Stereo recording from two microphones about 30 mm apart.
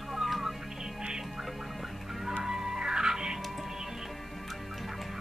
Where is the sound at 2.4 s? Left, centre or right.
Centre.